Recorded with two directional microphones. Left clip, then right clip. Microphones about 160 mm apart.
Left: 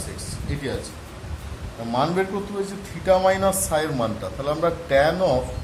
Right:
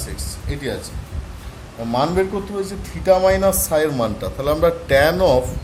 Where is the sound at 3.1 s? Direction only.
45° right (ahead or behind).